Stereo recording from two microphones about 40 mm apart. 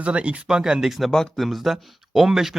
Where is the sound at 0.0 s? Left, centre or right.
Right.